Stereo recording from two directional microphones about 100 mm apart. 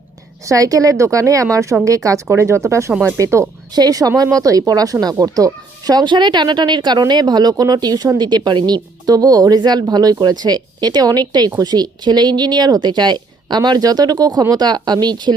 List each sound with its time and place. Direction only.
0.4 s speech: 35° right (ahead or behind)
3.8 s a woman's voice: 40° right (ahead or behind)